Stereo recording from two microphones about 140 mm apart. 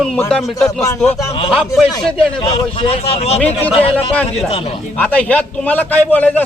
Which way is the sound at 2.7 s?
45° left (ahead or behind).